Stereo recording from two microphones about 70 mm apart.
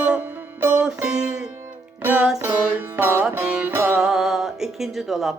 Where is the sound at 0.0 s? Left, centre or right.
Right.